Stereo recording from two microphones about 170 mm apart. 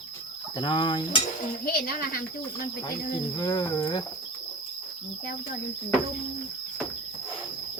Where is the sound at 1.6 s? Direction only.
60° left (ahead or behind).